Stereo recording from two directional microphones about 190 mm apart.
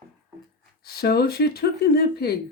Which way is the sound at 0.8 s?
55° left (ahead or behind).